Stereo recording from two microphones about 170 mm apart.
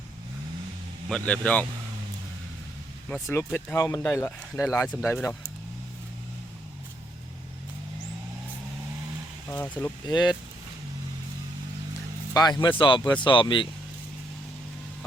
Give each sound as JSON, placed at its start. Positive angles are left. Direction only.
{"t": 1.1, "sound": "speech", "side_deg": 5}
{"t": 3.3, "sound": "speech", "side_deg": 10}
{"t": 3.8, "sound": "speech", "side_deg": 20}
{"t": 9.5, "sound": "speech", "side_deg": 10}
{"t": 10.1, "sound": "speech", "side_deg": 25}
{"t": 12.3, "sound": "speech", "side_deg": 25}